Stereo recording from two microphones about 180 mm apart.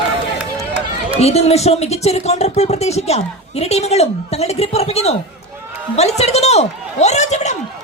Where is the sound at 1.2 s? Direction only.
35° left (ahead or behind).